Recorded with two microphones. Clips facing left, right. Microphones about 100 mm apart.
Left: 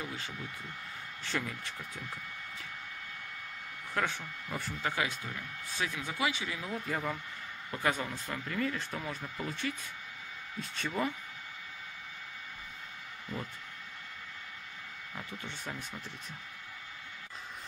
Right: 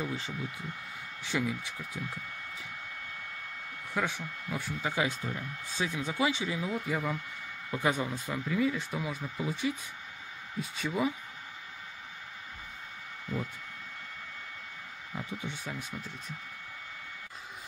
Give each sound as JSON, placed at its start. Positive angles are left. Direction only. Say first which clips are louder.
{"t": 1.2, "sound": "speech", "louder": "right 5 dB", "side_deg": -5}
{"t": 3.9, "sound": "speech", "louder": "right 1 dB", "side_deg": -5}
{"t": 4.9, "sound": "speech", "louder": "right 3 dB", "side_deg": -25}
{"t": 6.9, "sound": "speech", "louder": "right 2 dB", "side_deg": -5}
{"t": 15.1, "sound": "speech", "louder": "right 5 dB", "side_deg": -10}